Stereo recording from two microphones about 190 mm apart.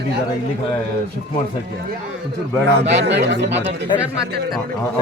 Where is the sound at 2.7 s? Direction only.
60° right (ahead or behind).